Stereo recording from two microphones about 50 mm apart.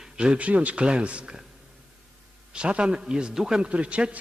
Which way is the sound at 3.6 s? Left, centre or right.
Right.